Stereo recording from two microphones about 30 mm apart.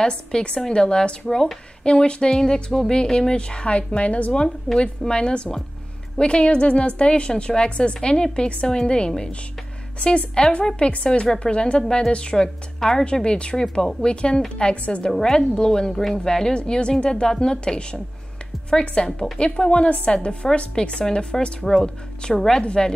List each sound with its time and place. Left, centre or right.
0.0 s a woman's voice: left
1.2 s speech: centre
1.9 s a woman's voice: left
2.3 s a woman's voice: centre; by 4.8 s left
5.1 s a woman's voice: left
10.8 s a woman's voice: left
11.3 s a woman's voice: left
15.0 s a woman's voice: centre
15.9 s speech: centre
16.3 s a woman's voice: left
20.8 s a woman's voice: left
21.5 s speech: centre
22.6 s a woman's voice: left